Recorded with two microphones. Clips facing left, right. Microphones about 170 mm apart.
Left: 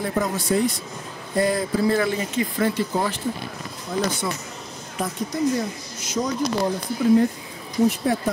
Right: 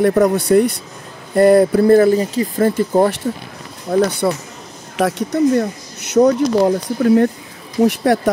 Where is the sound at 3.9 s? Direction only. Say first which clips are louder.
Right 11 dB; 60° right (ahead or behind).